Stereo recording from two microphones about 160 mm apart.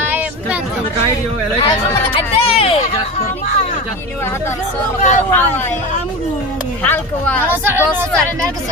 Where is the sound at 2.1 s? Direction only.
35° left (ahead or behind).